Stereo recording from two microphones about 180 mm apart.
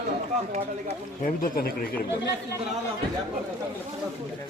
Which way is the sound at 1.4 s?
55° left (ahead or behind).